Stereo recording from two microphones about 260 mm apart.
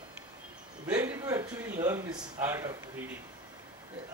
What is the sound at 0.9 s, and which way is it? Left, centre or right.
Speech, centre.